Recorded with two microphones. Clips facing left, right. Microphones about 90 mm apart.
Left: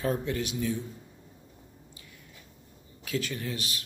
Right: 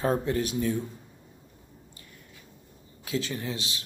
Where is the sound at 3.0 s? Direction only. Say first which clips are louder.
Right 1 dB; 25° right (ahead or behind).